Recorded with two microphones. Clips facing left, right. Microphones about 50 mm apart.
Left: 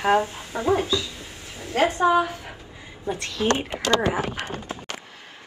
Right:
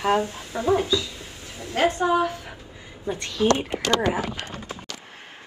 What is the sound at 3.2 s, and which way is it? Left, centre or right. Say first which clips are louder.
Speech: right 3 dB; left.